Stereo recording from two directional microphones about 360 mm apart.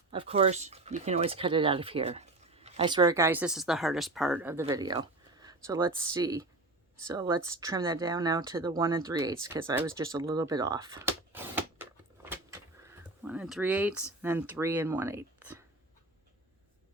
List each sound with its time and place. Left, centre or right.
0.1 s speech: centre
8.8 s a sound: centre
14.2 s speech: centre